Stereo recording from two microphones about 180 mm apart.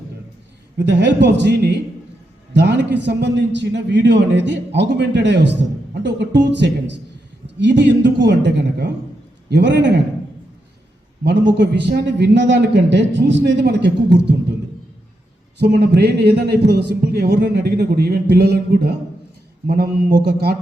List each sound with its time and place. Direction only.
0.9 s a man's voice: 75° right (ahead or behind)
11.2 s a man's voice: 70° right (ahead or behind)
15.5 s a man's voice: 70° right (ahead or behind)